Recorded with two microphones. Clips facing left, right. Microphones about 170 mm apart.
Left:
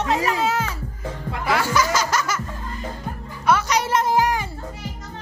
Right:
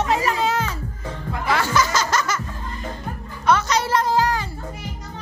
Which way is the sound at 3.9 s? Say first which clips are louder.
Left 1 dB; 20° left (ahead or behind).